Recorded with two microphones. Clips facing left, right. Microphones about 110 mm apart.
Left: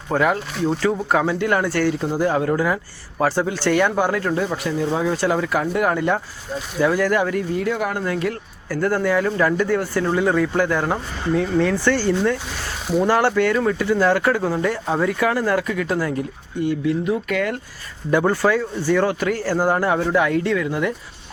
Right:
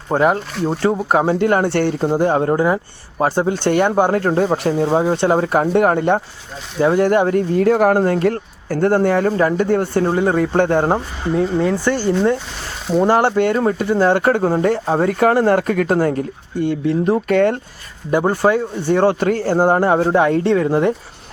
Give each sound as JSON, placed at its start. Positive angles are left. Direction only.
{"t": 0.1, "sound": "speech", "side_deg": -30}
{"t": 1.8, "sound": "speech", "side_deg": -45}
{"t": 4.1, "sound": "speech", "side_deg": -45}
{"t": 6.7, "sound": "speech", "side_deg": -30}
{"t": 8.8, "sound": "speech", "side_deg": -30}
{"t": 9.0, "sound": "speech", "side_deg": -45}
{"t": 11.3, "sound": "speech", "side_deg": -20}
{"t": 12.9, "sound": "speech", "side_deg": -30}
{"t": 16.6, "sound": "speech", "side_deg": -35}